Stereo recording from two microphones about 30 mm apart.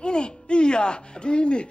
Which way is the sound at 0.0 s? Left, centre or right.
Left.